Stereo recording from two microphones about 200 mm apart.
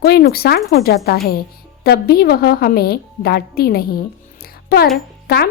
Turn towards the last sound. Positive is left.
turn(degrees=50)  # may be behind; listen again after turning